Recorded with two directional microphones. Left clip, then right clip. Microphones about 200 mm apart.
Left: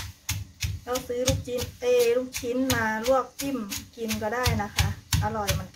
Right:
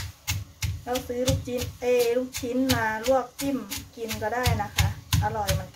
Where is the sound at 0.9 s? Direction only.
5° left (ahead or behind).